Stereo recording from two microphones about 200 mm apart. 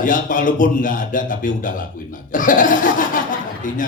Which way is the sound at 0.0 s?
40° left (ahead or behind).